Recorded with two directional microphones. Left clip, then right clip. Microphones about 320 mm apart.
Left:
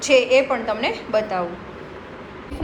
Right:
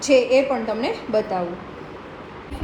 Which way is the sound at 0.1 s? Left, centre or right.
Centre.